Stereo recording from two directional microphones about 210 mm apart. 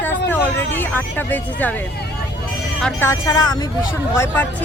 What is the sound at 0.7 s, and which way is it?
Speech, 10° left (ahead or behind).